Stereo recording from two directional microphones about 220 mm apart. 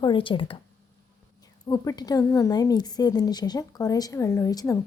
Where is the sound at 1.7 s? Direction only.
15° left (ahead or behind).